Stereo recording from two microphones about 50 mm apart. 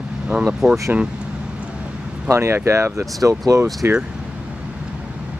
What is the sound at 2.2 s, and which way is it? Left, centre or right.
Speech, right.